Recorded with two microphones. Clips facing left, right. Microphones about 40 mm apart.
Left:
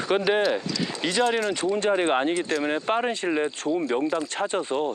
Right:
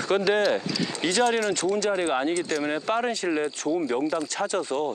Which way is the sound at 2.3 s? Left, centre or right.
Centre.